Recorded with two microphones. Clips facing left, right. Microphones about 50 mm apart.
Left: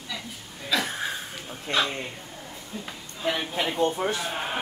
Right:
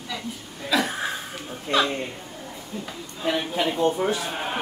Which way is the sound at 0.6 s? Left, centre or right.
Centre.